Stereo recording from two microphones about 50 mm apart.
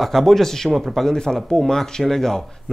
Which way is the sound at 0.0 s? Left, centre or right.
Centre.